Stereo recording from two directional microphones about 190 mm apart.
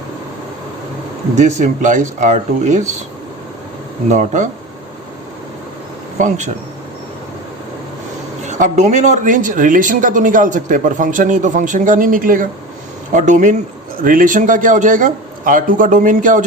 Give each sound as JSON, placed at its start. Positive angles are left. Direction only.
{"t": 1.4, "sound": "speech", "side_deg": -40}
{"t": 4.1, "sound": "speech", "side_deg": -40}
{"t": 6.1, "sound": "speech", "side_deg": -40}
{"t": 8.4, "sound": "speech", "side_deg": -40}